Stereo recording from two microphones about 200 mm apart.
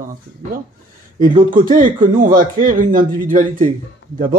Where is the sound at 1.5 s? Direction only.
40° right (ahead or behind).